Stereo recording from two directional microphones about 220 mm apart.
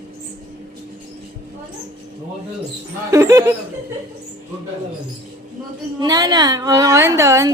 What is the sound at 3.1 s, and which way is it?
Speech, 15° right (ahead or behind).